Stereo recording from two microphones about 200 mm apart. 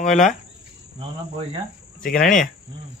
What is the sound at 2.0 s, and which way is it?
Speech, 5° left (ahead or behind).